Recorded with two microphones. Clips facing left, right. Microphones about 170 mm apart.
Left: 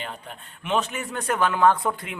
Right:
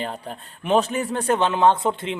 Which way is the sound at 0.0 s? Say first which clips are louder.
Right 6 dB; 35° right (ahead or behind).